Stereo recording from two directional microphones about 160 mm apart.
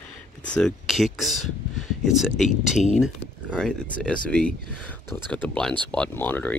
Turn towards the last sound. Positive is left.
turn(degrees=10)  # may be behind; listen again after turning